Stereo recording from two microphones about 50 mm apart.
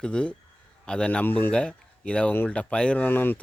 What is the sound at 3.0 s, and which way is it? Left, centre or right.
Speech, left.